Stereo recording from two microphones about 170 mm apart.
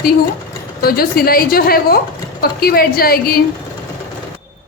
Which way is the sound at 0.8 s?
60° left (ahead or behind).